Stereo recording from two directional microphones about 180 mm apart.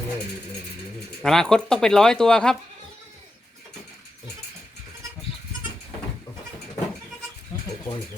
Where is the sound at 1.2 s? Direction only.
5° left (ahead or behind).